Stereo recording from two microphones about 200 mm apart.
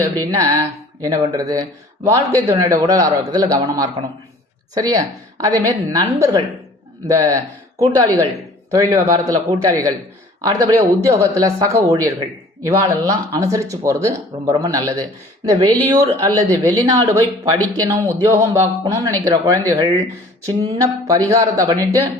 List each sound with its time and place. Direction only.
0.0 s speech: 15° right (ahead or behind)